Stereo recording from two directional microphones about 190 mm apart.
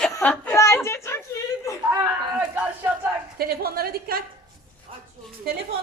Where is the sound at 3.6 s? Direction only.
50° right (ahead or behind).